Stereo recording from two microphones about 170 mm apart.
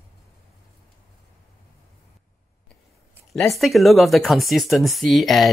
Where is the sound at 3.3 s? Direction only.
Centre (ahead or behind).